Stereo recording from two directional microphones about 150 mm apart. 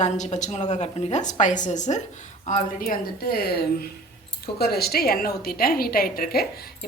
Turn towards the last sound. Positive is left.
turn(degrees=85)